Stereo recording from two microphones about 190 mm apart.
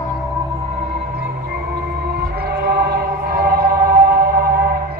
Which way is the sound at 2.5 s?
60° right (ahead or behind).